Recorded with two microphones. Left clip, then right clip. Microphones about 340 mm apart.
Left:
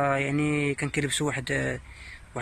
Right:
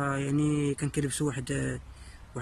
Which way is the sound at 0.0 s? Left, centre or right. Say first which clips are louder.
Left 5 dB; centre.